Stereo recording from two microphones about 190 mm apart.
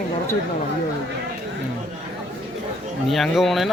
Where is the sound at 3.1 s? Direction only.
Centre (ahead or behind).